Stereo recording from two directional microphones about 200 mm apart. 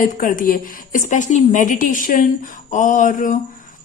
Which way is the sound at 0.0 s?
45° left (ahead or behind).